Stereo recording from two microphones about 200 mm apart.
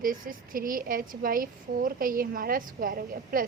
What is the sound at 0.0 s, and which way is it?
A woman's voice, 45° right (ahead or behind).